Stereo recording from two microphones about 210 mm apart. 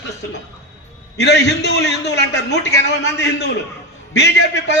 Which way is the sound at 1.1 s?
55° left (ahead or behind).